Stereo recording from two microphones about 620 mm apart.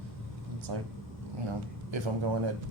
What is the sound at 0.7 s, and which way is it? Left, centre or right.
Speech, right.